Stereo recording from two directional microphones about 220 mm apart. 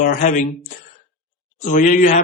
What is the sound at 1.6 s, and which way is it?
Speech, 35° left (ahead or behind).